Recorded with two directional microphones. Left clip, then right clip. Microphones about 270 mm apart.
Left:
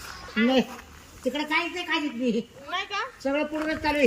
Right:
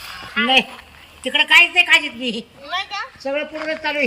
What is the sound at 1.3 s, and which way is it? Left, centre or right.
A woman's voice, centre.